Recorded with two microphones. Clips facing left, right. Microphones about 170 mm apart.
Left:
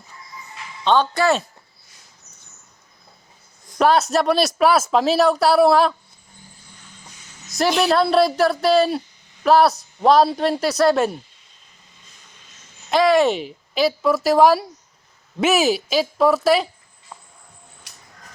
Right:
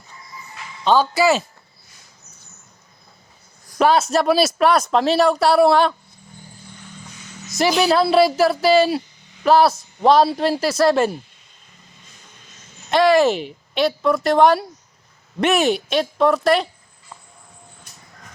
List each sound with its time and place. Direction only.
0.9 s speech: 5° right (ahead or behind)
3.8 s speech: centre (ahead or behind)
7.5 s speech: centre (ahead or behind)
12.9 s speech: centre (ahead or behind)
17.9 s a sound: 85° left